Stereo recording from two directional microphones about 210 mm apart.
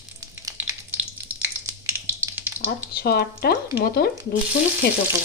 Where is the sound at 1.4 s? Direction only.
10° right (ahead or behind).